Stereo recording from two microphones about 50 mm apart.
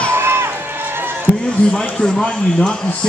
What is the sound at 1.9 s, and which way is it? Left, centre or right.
Speech, centre.